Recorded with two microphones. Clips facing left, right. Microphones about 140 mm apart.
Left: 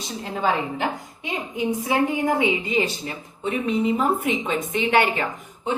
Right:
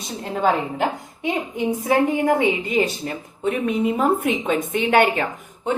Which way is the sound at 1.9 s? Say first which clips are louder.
Right 4 dB; 45° right (ahead or behind).